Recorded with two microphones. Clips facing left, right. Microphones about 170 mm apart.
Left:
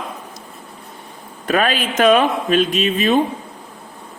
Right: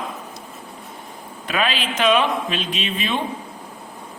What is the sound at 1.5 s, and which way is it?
Speech, 50° left (ahead or behind).